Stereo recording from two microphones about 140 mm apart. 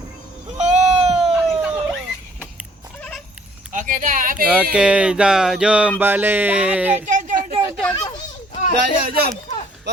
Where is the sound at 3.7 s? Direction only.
65° right (ahead or behind).